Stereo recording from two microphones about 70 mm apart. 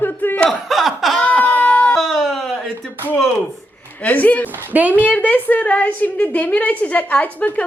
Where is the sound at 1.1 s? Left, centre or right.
Centre.